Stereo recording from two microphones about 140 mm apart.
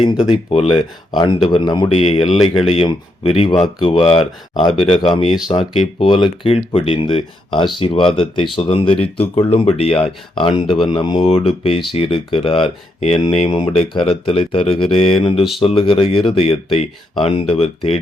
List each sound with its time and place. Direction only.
0.0 s speech: 40° left (ahead or behind)
2.0 s speech: 45° left (ahead or behind)